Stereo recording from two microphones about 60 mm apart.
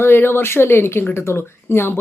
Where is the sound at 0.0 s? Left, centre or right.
Left.